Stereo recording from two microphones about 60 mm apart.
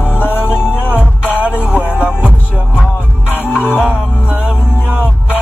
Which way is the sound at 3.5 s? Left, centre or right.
Left.